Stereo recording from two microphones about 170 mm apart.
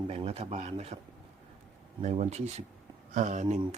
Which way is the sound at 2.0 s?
40° right (ahead or behind).